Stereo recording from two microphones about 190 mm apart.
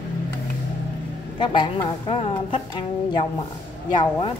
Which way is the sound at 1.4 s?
25° left (ahead or behind).